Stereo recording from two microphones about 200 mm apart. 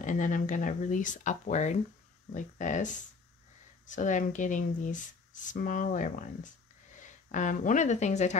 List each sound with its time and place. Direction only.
0.0 s speech: 40° left (ahead or behind)